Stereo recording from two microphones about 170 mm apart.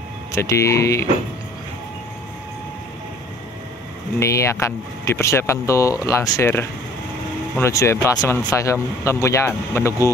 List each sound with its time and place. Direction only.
0.3 s speech: 15° left (ahead or behind)
4.2 s speech: 15° left (ahead or behind)